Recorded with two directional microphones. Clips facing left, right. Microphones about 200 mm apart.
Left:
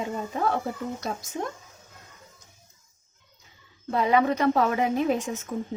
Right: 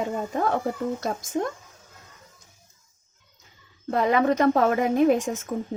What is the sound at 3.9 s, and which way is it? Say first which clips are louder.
Speech: right 1 dB; 45° right (ahead or behind).